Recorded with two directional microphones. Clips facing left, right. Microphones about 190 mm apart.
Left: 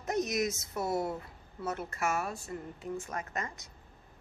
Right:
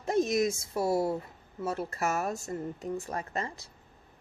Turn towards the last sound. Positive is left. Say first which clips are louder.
# right 3 dB
turn(degrees=-30)  # may be behind; listen again after turning